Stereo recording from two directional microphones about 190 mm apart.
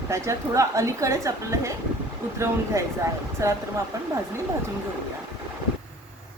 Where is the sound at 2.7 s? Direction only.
15° right (ahead or behind).